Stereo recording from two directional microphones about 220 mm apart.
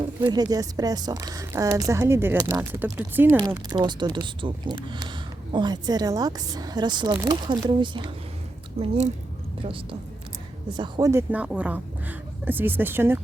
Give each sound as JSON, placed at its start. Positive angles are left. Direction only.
{"t": 0.2, "sound": "speech", "side_deg": -20}
{"t": 9.6, "sound": "a woman's voice", "side_deg": -25}